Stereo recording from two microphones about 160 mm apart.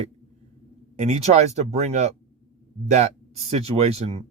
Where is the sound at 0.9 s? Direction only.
45° right (ahead or behind).